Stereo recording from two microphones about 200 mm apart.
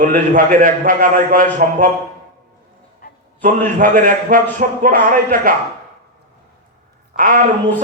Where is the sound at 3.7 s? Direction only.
40° right (ahead or behind).